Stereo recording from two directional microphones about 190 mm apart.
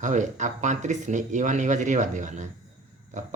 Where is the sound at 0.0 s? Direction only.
40° right (ahead or behind).